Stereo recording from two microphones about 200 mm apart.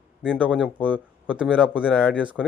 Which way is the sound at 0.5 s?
5° left (ahead or behind).